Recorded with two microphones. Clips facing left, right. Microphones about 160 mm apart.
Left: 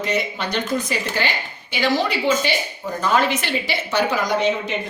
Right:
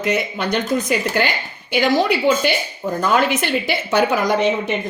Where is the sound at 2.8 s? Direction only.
45° right (ahead or behind).